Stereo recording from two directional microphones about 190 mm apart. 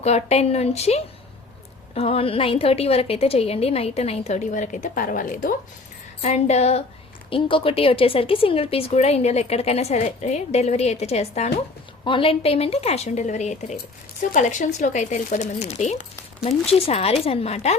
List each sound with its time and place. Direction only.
0.0 s speech: 35° left (ahead or behind)
6.2 s speech: 35° left (ahead or behind)